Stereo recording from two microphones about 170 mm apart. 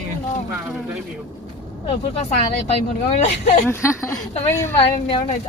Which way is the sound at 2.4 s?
35° left (ahead or behind).